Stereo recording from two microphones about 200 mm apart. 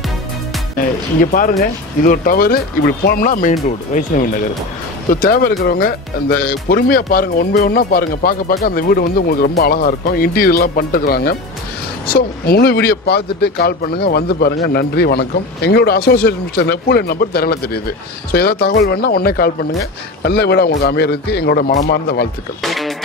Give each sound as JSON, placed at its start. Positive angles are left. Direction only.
{"t": 1.2, "sound": "speech", "side_deg": 45}
{"t": 22.6, "sound": "music", "side_deg": 0}